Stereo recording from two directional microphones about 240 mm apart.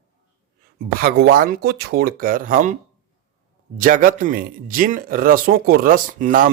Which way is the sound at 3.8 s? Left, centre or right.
Right.